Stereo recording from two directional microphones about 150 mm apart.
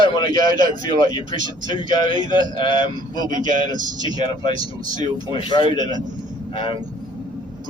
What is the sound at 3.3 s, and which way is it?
Speech, 60° right (ahead or behind).